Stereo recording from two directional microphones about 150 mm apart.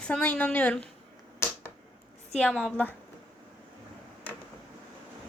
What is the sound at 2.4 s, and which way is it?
Speech, 5° left (ahead or behind).